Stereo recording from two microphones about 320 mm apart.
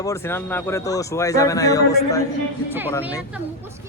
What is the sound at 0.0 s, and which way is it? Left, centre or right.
Speech, centre.